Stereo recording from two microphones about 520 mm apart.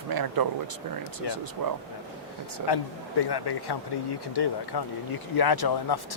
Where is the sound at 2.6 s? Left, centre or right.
Left.